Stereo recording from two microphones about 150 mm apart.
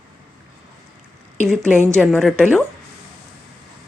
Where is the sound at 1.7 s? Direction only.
15° right (ahead or behind).